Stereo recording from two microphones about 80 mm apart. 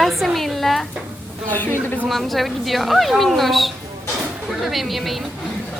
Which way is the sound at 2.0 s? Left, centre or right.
Centre.